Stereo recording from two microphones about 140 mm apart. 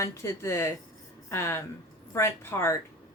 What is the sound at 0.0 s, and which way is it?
Speech, 20° left (ahead or behind).